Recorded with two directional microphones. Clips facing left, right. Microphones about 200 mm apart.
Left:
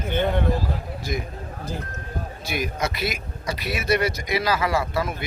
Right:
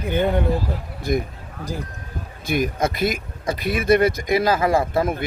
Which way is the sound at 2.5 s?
50° right (ahead or behind).